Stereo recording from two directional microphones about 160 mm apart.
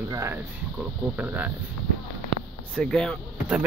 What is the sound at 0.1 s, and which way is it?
Speech, 20° right (ahead or behind).